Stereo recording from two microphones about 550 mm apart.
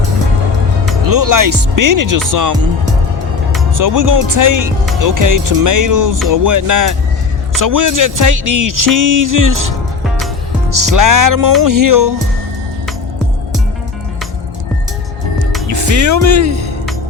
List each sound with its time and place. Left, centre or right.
1.0 s speech: right
3.8 s speech: right
10.8 s speech: right
15.6 s speech: right